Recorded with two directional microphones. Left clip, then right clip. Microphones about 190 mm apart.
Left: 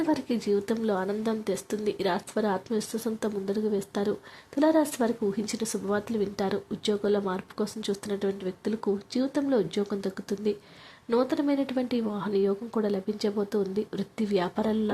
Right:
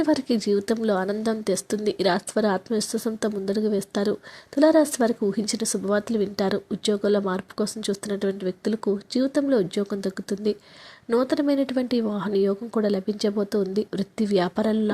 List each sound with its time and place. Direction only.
0.0 s a woman's voice: 20° right (ahead or behind)